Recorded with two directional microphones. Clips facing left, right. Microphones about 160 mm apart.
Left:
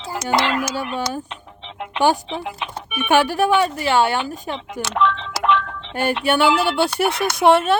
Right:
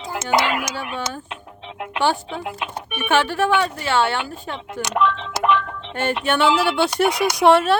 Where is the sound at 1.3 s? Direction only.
5° right (ahead or behind).